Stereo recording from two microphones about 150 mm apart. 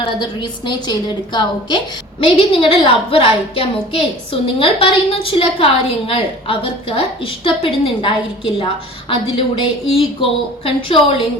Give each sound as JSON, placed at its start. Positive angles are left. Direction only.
{"t": 0.0, "sound": "a woman's voice", "side_deg": 30}